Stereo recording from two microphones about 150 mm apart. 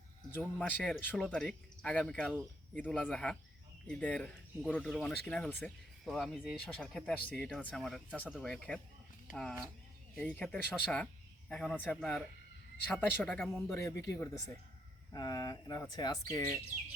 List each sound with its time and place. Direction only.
0.3 s speech: 10° left (ahead or behind)
13.7 s speech: 20° left (ahead or behind)
16.3 s speech: 15° left (ahead or behind)